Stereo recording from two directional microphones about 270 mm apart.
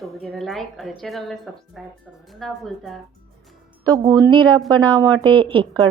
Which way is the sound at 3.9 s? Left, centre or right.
Centre.